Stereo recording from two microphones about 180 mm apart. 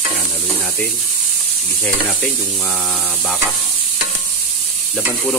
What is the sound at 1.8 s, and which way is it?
Speech, 5° left (ahead or behind).